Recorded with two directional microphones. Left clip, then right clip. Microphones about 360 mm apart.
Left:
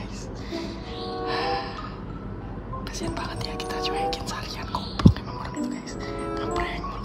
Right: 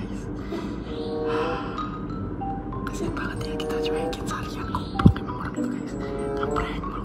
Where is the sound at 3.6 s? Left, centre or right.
Centre.